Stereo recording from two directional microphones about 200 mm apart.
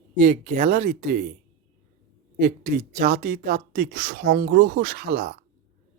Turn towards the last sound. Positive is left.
turn(degrees=-50)  # may be behind; listen again after turning